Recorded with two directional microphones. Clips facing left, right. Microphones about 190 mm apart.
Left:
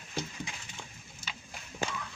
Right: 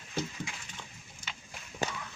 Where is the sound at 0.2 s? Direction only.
15° left (ahead or behind).